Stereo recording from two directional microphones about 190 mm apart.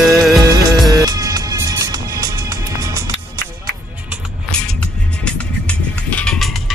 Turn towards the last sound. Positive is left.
turn(degrees=5)  # may be behind; listen again after turning